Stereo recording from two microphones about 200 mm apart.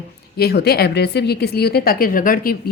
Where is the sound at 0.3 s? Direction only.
55° left (ahead or behind).